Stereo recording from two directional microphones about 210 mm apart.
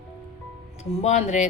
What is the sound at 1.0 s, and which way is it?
Speech, 30° left (ahead or behind).